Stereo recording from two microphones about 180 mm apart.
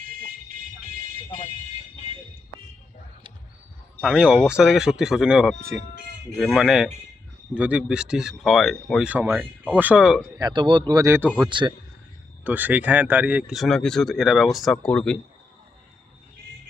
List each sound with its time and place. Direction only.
4.0 s speech: 5° right (ahead or behind)
9.0 s speech: 10° right (ahead or behind)
10.3 s speech: 25° right (ahead or behind)
11.4 s speech: 25° right (ahead or behind)
12.5 s speech: 10° right (ahead or behind)